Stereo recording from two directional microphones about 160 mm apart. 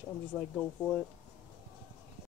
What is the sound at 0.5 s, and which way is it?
Speech, 5° left (ahead or behind).